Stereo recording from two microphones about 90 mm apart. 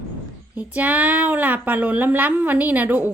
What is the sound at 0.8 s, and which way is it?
A woman's voice, 15° right (ahead or behind).